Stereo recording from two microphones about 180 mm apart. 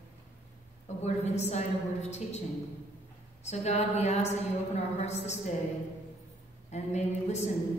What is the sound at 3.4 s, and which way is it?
A woman's voice, 40° left (ahead or behind).